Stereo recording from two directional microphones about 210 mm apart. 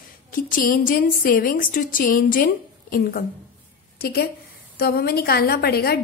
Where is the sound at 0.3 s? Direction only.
40° left (ahead or behind).